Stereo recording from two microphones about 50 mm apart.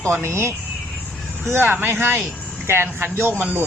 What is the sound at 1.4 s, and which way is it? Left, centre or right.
Speech, right.